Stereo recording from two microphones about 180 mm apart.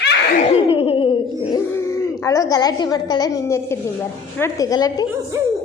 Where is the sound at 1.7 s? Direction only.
15° left (ahead or behind).